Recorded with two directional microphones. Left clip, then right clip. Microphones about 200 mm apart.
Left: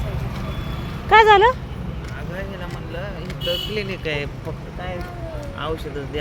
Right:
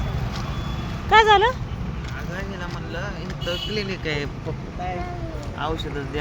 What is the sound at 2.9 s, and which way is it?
Speech, 10° right (ahead or behind).